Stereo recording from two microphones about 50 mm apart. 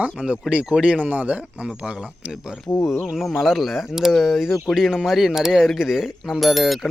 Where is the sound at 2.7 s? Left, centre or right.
Left.